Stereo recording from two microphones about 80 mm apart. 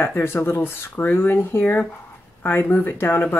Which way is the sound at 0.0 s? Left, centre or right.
Left.